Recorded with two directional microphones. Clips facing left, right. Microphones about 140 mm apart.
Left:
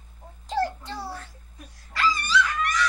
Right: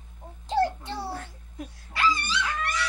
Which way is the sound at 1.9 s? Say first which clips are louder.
Left 3 dB; 25° right (ahead or behind).